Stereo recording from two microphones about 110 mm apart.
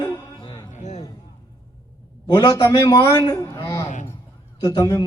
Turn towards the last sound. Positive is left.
turn(degrees=35)  # may be behind; listen again after turning